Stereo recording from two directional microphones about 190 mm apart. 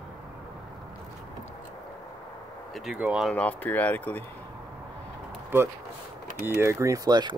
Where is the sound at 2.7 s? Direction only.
5° right (ahead or behind).